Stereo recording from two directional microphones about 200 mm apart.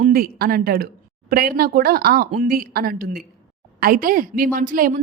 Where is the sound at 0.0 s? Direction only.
45° right (ahead or behind).